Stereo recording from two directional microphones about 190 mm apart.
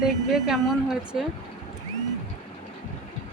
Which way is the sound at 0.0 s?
Centre (ahead or behind).